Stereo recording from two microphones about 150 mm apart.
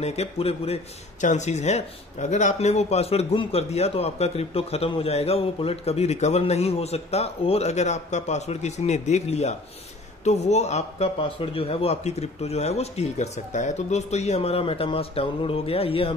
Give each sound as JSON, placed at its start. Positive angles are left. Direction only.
{"t": 0.0, "sound": "speech", "side_deg": 45}